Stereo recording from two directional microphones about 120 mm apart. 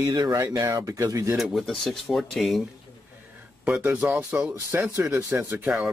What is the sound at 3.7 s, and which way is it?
Speech, 15° right (ahead or behind).